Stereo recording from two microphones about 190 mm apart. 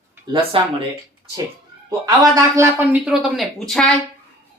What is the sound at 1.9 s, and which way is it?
A man's voice, 20° right (ahead or behind).